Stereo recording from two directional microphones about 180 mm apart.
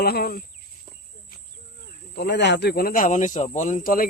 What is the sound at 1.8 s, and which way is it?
Speech, 70° left (ahead or behind).